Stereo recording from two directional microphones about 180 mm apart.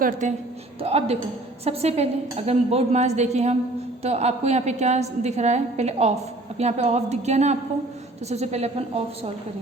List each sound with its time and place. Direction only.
0.0 s a man's voice: 45° right (ahead or behind)